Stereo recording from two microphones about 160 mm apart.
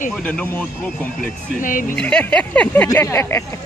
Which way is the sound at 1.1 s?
55° left (ahead or behind).